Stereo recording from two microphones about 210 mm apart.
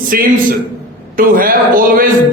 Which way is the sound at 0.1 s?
45° right (ahead or behind).